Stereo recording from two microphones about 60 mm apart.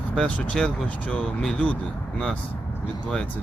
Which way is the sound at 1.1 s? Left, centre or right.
Centre.